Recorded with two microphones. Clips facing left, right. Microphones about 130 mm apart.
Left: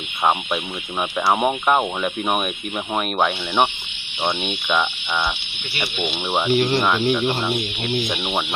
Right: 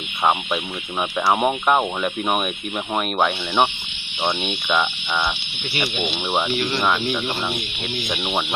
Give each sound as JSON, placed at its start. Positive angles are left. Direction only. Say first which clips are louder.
{"t": 1.3, "sound": "speech", "louder": "even", "side_deg": 0}
{"t": 6.5, "sound": "speech", "louder": "left 5 dB", "side_deg": 30}
{"t": 7.1, "sound": "speech", "louder": "left 4 dB", "side_deg": 0}